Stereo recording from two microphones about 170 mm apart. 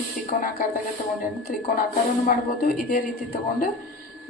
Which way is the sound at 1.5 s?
55° left (ahead or behind).